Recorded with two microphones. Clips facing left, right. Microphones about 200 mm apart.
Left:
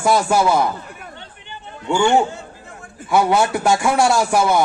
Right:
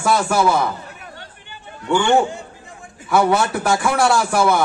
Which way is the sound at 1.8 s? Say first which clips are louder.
Even; 15° left (ahead or behind).